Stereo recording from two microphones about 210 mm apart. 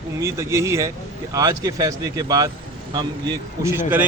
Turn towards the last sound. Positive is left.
turn(degrees=-10)  # may be behind; listen again after turning